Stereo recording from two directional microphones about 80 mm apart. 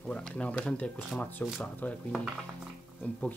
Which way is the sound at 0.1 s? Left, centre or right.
Centre.